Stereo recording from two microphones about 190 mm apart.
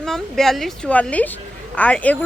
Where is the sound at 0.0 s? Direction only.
Centre (ahead or behind).